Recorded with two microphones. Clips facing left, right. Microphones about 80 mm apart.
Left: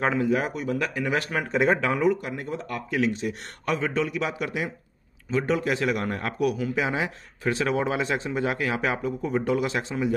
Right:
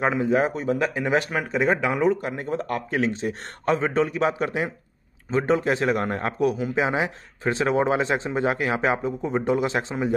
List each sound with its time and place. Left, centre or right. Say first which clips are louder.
0.2 s a man's voice: right 3 dB; right
1.3 s speech: even; centre
2.2 s a man's voice: right 4 dB; right